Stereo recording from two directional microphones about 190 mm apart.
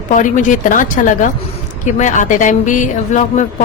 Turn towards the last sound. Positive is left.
turn(degrees=40)  # may be behind; listen again after turning